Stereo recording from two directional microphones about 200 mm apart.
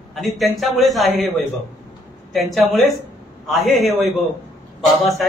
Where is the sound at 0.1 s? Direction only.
Centre (ahead or behind).